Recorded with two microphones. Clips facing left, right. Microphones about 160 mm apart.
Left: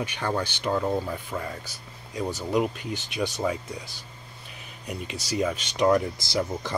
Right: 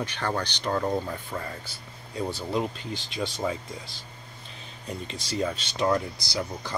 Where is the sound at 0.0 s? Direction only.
10° left (ahead or behind).